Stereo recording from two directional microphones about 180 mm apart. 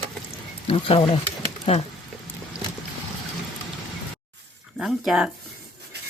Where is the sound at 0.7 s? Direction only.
30° left (ahead or behind).